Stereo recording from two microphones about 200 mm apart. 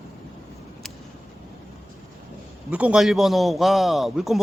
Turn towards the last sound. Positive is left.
turn(degrees=0)  # may be behind; listen again after turning